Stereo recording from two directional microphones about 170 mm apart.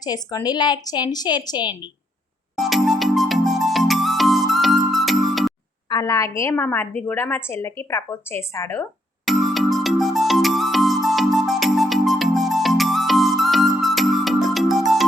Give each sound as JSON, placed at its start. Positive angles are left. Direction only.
{"t": 0.0, "sound": "a woman's voice", "side_deg": 20}
{"t": 2.6, "sound": "music", "side_deg": 0}
{"t": 5.9, "sound": "a woman's voice", "side_deg": 20}
{"t": 9.2, "sound": "music", "side_deg": 0}